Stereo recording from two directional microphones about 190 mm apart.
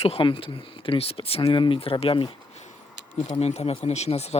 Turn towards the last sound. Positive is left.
turn(degrees=35)  # may be behind; listen again after turning